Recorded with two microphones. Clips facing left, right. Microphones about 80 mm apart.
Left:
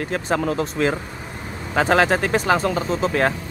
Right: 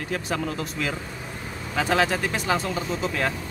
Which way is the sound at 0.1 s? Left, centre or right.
Left.